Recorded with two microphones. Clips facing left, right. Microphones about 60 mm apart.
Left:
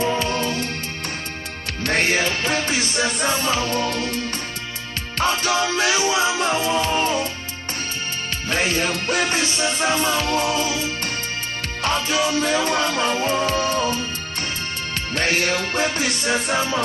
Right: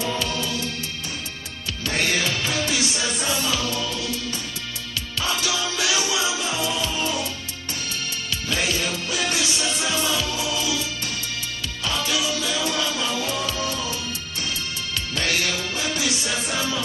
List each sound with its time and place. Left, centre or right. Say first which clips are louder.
0.0 s music: left 5 dB; left
1.8 s music: left 5 dB; left
2.0 s music: left 3 dB; left
5.2 s music: left 6 dB; left
8.5 s music: left 4 dB; left
15.1 s music: left 4 dB; left